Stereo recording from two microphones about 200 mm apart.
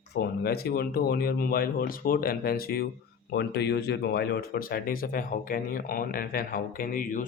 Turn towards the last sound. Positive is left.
turn(degrees=45)  # may be behind; listen again after turning